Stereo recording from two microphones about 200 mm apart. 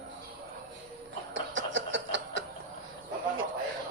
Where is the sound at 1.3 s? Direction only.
65° right (ahead or behind).